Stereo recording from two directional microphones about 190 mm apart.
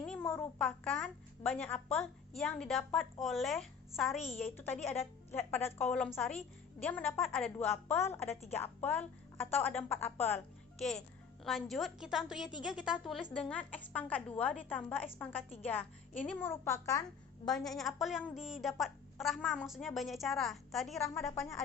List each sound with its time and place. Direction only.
0.0 s a child's voice: 10° left (ahead or behind)
4.2 s a woman's voice: 35° left (ahead or behind)
4.4 s a woman's voice: 10° left (ahead or behind)
7.7 s a woman's voice: 10° left (ahead or behind)
17.4 s a woman's voice: centre (ahead or behind)